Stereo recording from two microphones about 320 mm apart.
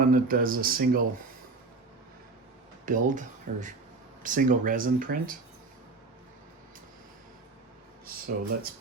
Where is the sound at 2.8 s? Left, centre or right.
Right.